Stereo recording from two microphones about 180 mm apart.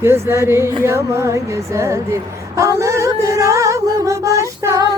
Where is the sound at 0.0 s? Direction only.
15° right (ahead or behind).